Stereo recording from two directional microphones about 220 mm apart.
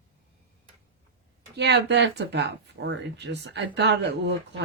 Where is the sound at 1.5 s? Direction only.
50° right (ahead or behind).